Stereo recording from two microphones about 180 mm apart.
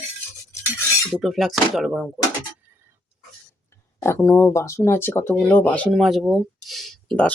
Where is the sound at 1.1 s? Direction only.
Centre (ahead or behind).